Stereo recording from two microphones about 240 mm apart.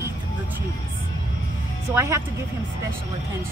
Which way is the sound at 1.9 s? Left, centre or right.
Centre.